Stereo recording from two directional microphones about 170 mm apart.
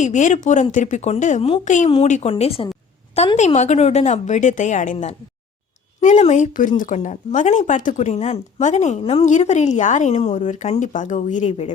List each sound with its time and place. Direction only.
0.0 s speech: 45° left (ahead or behind)